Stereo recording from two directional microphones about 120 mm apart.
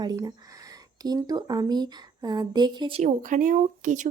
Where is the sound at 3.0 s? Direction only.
90° right.